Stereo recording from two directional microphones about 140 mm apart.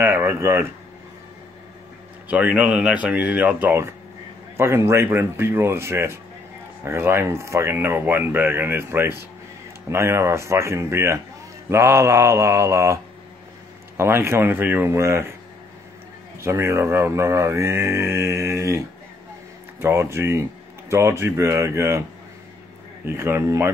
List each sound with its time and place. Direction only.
0.0 s speech: 15° right (ahead or behind)
2.2 s speech: 10° right (ahead or behind)
16.3 s speech: 20° right (ahead or behind)
23.0 s speech: 15° right (ahead or behind)